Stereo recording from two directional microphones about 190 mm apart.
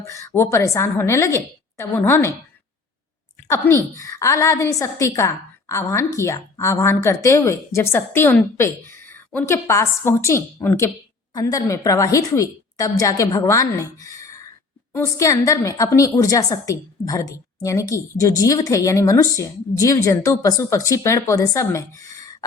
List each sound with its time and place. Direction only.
0.0 s a woman's voice: 15° left (ahead or behind)
3.4 s a woman's voice: 15° left (ahead or behind)